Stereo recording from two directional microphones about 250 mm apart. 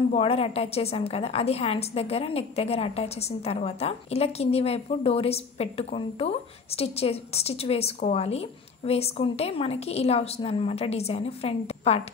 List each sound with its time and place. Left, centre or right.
0.1 s a woman's voice: left